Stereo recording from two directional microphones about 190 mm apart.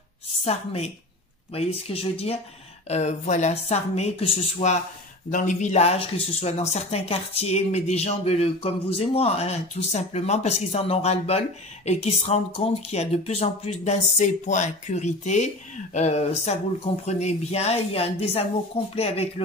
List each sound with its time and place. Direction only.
0.4 s speech: 35° left (ahead or behind)